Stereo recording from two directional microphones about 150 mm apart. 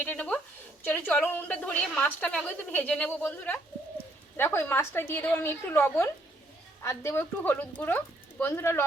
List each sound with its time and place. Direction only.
0.0 s a woman's voice: 10° left (ahead or behind)